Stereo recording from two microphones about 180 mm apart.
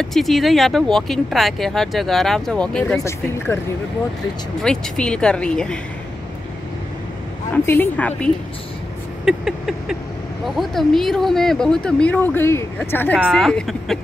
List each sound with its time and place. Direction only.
0.0 s a woman's voice: centre (ahead or behind)
4.6 s speech: 5° left (ahead or behind)
7.5 s a woman's voice: 10° left (ahead or behind)
9.2 s rodents: 5° right (ahead or behind)
10.4 s speech: centre (ahead or behind)
13.2 s speech: centre (ahead or behind)